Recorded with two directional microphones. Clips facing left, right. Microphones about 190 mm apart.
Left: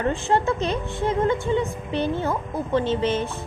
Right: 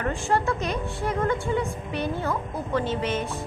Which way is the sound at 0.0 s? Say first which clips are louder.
Left 3 dB; 25° left (ahead or behind).